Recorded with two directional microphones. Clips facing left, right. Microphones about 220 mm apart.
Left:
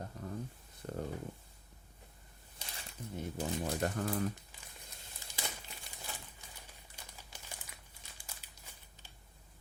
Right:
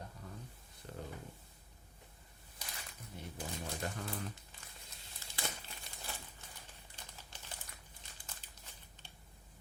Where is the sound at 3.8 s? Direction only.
50° left (ahead or behind).